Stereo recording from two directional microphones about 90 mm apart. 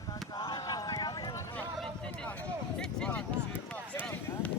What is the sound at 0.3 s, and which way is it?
Clip-clop, 55° left (ahead or behind).